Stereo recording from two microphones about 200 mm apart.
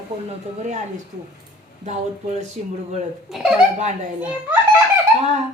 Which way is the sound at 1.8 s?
35° right (ahead or behind).